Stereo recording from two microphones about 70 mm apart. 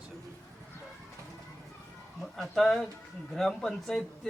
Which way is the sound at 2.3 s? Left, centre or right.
Centre.